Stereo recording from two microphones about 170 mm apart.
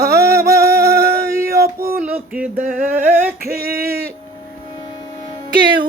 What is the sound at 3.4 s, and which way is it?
Female singing, 65° right (ahead or behind).